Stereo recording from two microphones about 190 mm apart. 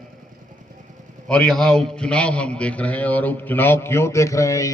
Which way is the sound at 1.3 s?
5° left (ahead or behind).